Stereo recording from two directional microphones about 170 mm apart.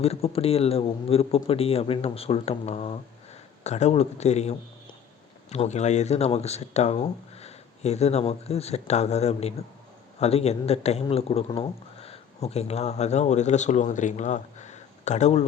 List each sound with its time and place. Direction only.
0.0 s speech: 35° left (ahead or behind)